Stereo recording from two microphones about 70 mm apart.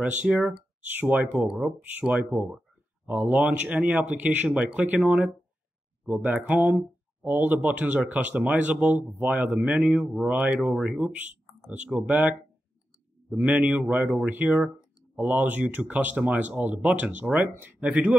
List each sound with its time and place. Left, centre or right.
0.0 s speech: right
3.1 s speech: right
6.0 s speech: right
10.8 s speech: centre
11.1 s speech: right
15.1 s speech: right